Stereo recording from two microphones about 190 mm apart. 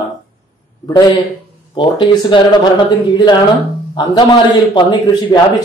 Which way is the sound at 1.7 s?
25° left (ahead or behind).